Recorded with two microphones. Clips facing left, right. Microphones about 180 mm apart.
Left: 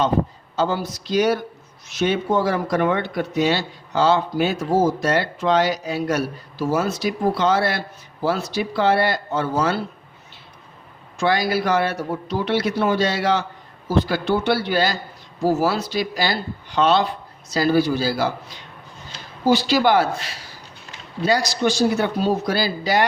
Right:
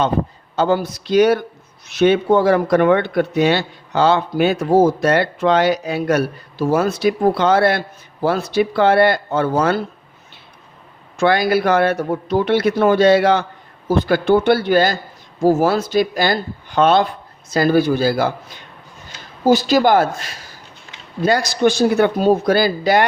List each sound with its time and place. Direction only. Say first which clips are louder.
0.5 s speech: right 5 dB; 60° right (ahead or behind)
11.2 s speech: right 5 dB; 55° right (ahead or behind)